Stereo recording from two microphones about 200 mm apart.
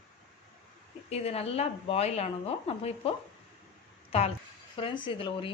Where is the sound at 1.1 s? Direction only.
30° left (ahead or behind).